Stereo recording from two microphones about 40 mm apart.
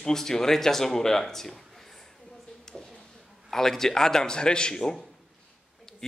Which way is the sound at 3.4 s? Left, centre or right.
Centre.